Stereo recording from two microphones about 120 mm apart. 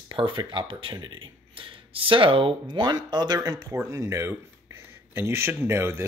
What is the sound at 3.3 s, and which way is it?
Speech, 25° right (ahead or behind).